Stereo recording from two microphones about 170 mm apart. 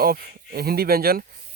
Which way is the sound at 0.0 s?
60° right (ahead or behind).